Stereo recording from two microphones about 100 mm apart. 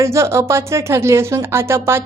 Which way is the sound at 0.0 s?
30° right (ahead or behind).